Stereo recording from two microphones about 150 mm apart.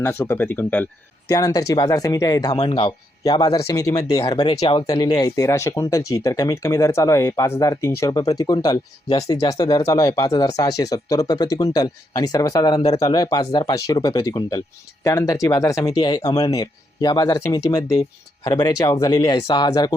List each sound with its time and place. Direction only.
0.0 s speech: 20° left (ahead or behind)
1.3 s speech: 25° left (ahead or behind)